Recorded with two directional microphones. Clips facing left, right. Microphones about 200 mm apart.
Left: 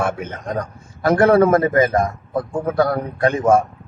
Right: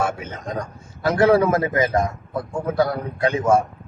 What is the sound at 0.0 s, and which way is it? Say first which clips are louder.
A man's voice: left 2 dB; 55° left (ahead or behind).